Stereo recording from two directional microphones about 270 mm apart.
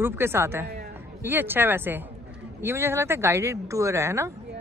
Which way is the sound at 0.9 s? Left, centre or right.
Centre.